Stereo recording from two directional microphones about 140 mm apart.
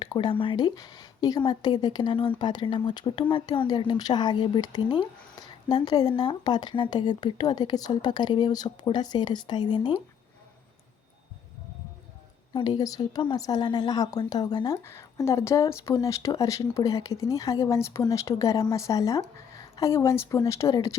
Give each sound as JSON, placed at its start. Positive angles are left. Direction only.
{"t": 0.0, "sound": "speech", "side_deg": 35}
{"t": 12.5, "sound": "speech", "side_deg": 30}
{"t": 14.8, "sound": "speech", "side_deg": 20}